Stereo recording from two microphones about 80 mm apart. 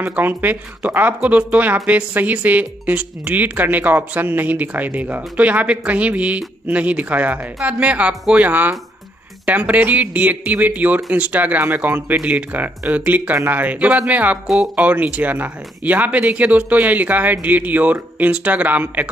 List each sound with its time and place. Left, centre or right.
0.0 s speech: right